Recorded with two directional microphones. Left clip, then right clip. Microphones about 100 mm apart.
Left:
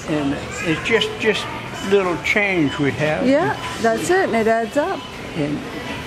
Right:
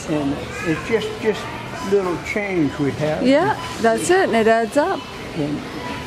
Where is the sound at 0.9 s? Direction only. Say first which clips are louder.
Left 4 dB; 25° left (ahead or behind).